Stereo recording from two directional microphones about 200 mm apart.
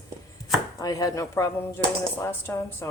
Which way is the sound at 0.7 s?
20° left (ahead or behind).